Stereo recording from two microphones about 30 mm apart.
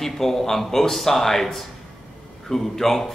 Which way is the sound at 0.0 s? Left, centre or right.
Centre.